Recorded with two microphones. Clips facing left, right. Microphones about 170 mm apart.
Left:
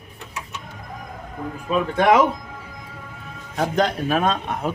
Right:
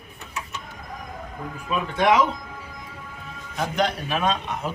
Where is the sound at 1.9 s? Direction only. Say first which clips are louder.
Left 3 dB; 55° left (ahead or behind).